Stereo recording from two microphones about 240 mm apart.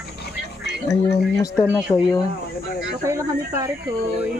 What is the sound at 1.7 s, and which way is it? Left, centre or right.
Speech, centre.